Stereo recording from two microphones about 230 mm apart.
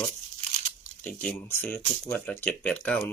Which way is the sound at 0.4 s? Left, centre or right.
Right.